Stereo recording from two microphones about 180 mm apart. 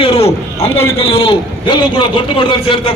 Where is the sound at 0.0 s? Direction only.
35° left (ahead or behind).